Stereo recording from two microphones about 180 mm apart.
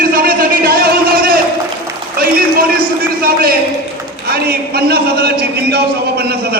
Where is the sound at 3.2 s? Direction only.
55° right (ahead or behind).